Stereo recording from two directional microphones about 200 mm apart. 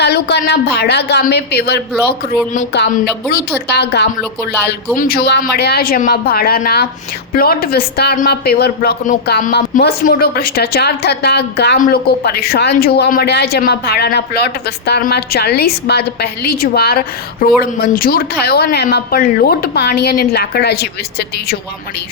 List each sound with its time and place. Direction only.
0.0 s a woman's voice: 55° left (ahead or behind)
2.9 s a woman's voice: 50° left (ahead or behind)